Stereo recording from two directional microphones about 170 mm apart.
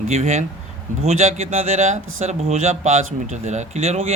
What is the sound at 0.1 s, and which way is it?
Speech, 45° right (ahead or behind).